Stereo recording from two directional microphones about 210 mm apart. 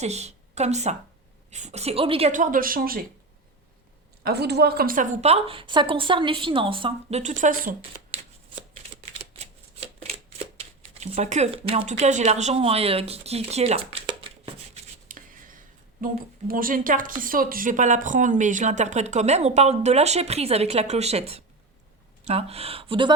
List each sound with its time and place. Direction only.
0.0 s a woman's voice: 30° right (ahead or behind)
4.2 s a woman's voice: 50° right (ahead or behind)
9.4 s shuffling cards: 30° right (ahead or behind)
10.6 s speech: 30° right (ahead or behind)
15.0 s a sound: 40° right (ahead or behind)
16.5 s a woman's voice: 40° right (ahead or behind); by 23.1 s 25° right (ahead or behind)